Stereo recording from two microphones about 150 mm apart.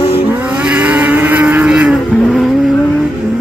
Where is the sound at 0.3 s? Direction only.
10° right (ahead or behind).